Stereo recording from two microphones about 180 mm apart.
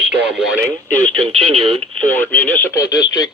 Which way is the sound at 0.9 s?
5° left (ahead or behind).